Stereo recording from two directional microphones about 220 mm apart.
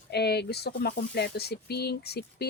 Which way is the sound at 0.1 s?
50° left (ahead or behind).